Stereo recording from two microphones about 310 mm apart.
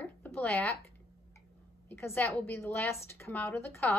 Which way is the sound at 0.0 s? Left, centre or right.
Centre.